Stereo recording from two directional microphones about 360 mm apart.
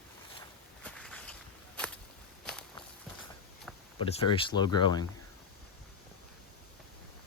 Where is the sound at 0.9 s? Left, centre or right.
Centre.